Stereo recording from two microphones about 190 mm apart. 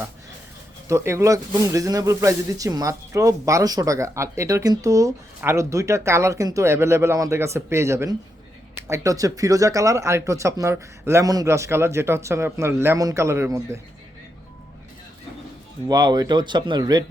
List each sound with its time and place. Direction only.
0.9 s speech: 15° right (ahead or behind)
15.9 s speech: 20° right (ahead or behind)